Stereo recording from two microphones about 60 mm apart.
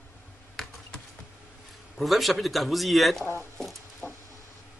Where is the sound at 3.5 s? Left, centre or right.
Centre.